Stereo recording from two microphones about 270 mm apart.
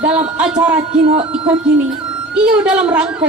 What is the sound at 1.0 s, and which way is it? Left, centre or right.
Speech, right.